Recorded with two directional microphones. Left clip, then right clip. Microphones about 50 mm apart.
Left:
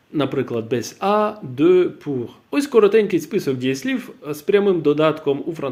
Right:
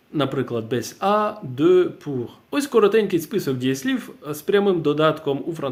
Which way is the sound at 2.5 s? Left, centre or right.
Right.